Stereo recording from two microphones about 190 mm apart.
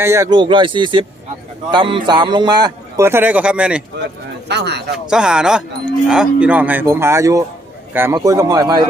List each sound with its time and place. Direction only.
0.0 s speech: 15° right (ahead or behind)
4.4 s speech: 60° right (ahead or behind)
5.0 s livestock: 5° right (ahead or behind)
7.9 s speech: 15° right (ahead or behind)